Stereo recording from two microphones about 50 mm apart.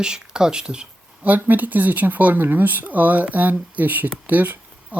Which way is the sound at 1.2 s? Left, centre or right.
Right.